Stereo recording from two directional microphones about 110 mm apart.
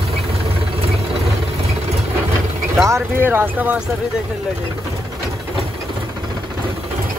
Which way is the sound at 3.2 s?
15° right (ahead or behind).